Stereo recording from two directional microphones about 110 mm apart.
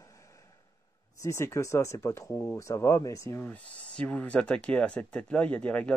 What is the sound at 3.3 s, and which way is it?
Speech, 15° left (ahead or behind).